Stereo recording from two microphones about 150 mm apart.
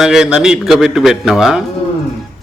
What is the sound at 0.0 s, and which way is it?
A man's voice, 5° right (ahead or behind).